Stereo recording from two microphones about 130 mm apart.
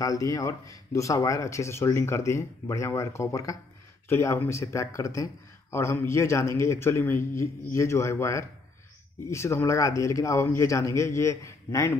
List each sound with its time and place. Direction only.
0.0 s speech: 25° left (ahead or behind)